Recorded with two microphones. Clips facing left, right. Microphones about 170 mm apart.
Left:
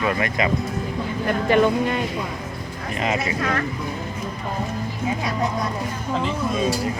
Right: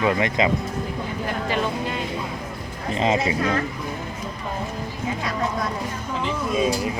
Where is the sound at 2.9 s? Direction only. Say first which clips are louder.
Right 3 dB; 25° right (ahead or behind).